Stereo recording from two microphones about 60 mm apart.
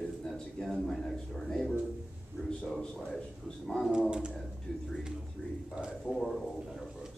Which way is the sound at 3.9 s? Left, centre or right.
Centre.